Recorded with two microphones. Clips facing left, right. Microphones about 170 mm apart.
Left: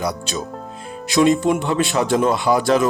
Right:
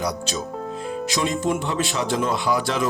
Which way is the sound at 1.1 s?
65° left (ahead or behind).